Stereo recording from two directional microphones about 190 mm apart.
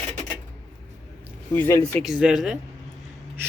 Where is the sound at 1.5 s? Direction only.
10° left (ahead or behind).